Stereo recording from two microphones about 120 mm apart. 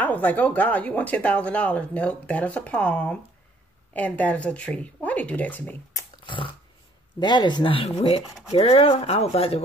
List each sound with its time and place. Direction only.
0.0 s speech: 15° left (ahead or behind)
6.2 s dog: 45° left (ahead or behind)
7.2 s speech: 40° left (ahead or behind); by 9.6 s 55° left (ahead or behind)